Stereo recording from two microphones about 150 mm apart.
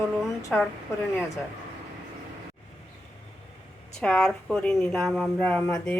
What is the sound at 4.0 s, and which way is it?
A woman's voice, 5° left (ahead or behind).